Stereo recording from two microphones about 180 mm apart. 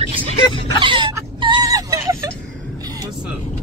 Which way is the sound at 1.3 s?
25° right (ahead or behind).